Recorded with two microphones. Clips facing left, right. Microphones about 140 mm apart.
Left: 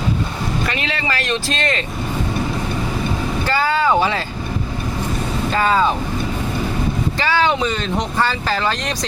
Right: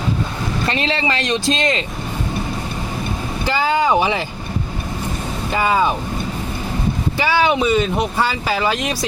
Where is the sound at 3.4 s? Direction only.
15° right (ahead or behind).